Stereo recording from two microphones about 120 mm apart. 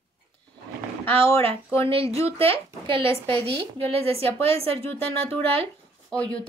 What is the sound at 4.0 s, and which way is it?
Speech, 55° right (ahead or behind).